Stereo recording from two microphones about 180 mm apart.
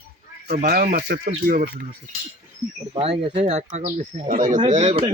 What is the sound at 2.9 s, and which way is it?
Speech, 30° right (ahead or behind).